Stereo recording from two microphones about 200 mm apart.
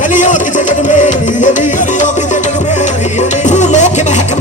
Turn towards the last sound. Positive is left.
turn(degrees=35)  # may be behind; listen again after turning